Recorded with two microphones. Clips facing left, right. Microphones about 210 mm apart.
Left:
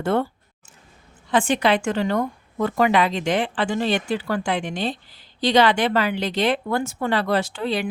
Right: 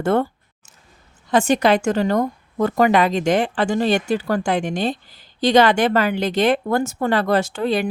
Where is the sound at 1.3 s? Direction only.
40° right (ahead or behind).